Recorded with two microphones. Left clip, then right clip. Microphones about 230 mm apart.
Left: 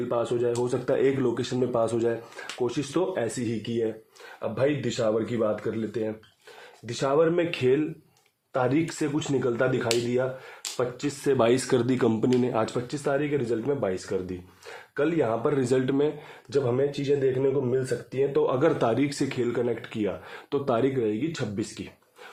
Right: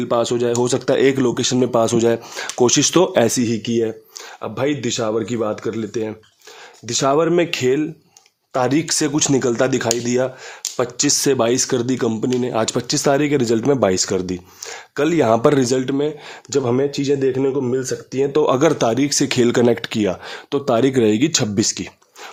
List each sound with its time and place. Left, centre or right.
0.1 s speech: right
11.3 s speech: centre
12.3 s speech: right
12.9 s speech: right
15.6 s speech: right
16.5 s speech: right
20.5 s speech: right